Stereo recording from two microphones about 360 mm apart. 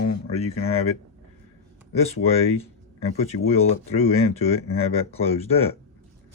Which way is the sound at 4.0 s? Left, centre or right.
Centre.